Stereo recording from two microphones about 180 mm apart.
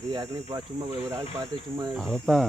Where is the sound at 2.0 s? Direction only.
Centre (ahead or behind).